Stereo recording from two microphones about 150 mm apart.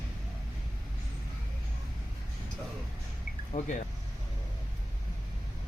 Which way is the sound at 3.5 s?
50° left (ahead or behind).